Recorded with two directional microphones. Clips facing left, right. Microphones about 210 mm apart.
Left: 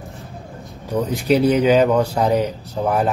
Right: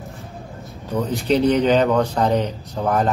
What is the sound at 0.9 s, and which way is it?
Speech, 15° left (ahead or behind).